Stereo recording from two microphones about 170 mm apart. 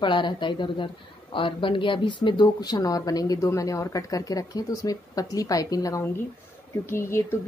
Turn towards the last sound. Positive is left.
turn(degrees=15)  # may be behind; listen again after turning